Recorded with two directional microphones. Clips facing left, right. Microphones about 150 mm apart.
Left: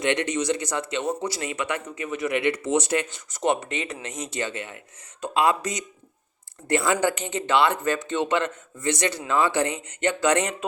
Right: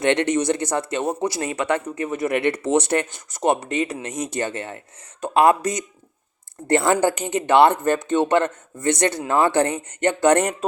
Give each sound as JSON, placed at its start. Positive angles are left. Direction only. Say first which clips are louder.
{"t": 0.0, "sound": "speech", "louder": "right 5 dB", "side_deg": -60}
{"t": 3.3, "sound": "speech", "louder": "right 4 dB", "side_deg": -40}